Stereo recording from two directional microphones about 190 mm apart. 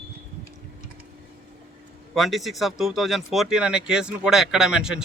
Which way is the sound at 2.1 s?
Centre (ahead or behind).